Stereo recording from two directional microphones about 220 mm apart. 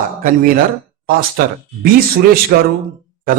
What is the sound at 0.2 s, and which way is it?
Speech, 40° right (ahead or behind).